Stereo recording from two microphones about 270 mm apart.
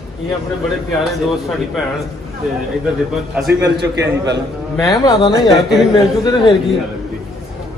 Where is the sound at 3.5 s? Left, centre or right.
Right.